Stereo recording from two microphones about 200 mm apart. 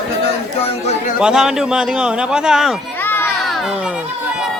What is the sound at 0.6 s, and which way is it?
Chatter, 35° left (ahead or behind).